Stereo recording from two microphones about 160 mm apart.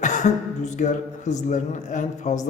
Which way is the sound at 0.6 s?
50° left (ahead or behind).